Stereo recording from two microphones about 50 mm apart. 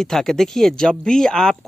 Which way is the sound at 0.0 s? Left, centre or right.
Centre.